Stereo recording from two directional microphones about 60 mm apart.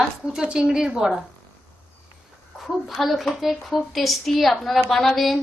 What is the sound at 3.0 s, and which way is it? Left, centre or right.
A woman's voice, centre.